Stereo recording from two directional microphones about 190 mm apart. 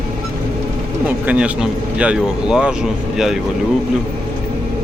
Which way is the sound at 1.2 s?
5° right (ahead or behind).